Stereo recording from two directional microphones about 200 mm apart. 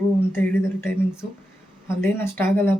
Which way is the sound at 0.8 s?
5° right (ahead or behind).